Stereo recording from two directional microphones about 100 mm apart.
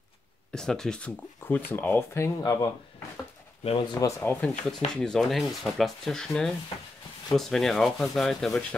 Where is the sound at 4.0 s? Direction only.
20° left (ahead or behind).